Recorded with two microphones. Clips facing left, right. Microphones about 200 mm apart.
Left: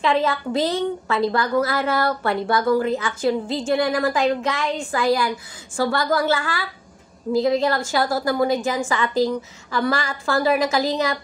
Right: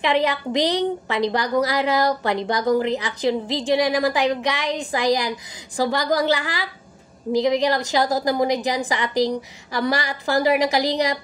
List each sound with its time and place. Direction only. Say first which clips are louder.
0.0 s a woman's voice: even; 20° right (ahead or behind)